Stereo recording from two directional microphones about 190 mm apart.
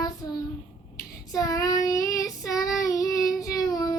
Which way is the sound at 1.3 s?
20° left (ahead or behind).